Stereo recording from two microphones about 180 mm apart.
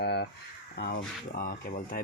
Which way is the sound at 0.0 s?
65° left (ahead or behind).